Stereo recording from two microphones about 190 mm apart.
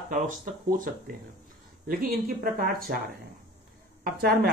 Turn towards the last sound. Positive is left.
turn(degrees=-55)  # may be behind; listen again after turning